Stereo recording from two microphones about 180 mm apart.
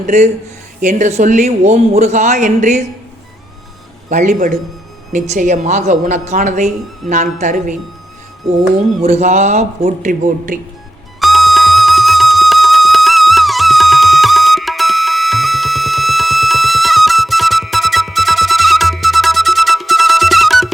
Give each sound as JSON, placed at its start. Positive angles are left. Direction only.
{"t": 0.0, "sound": "a man's voice", "side_deg": -40}
{"t": 4.1, "sound": "a man's voice", "side_deg": -40}
{"t": 9.0, "sound": "a man's voice", "side_deg": -35}
{"t": 11.2, "sound": "music", "side_deg": 0}